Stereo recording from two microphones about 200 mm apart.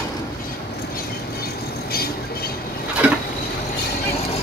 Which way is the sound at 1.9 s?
50° left (ahead or behind).